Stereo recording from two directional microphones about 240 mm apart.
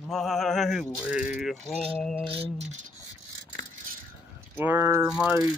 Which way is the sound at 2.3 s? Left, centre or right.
Right.